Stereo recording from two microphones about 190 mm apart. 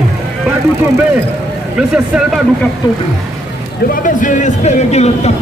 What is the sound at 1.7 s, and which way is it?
Speech, 5° right (ahead or behind).